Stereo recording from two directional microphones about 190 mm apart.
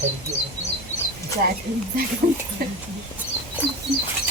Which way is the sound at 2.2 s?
45° right (ahead or behind).